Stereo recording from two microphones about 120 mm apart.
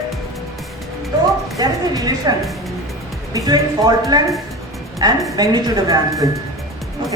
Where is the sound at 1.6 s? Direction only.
30° right (ahead or behind).